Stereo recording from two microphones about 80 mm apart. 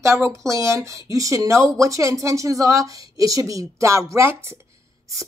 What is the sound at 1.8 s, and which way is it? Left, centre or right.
Speech, right.